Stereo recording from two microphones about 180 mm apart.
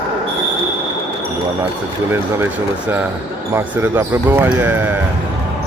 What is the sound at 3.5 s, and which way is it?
Speech, 10° right (ahead or behind).